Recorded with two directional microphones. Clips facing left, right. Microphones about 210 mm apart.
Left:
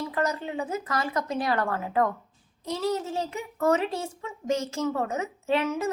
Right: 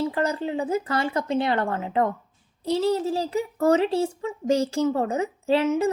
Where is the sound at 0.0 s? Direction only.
30° right (ahead or behind).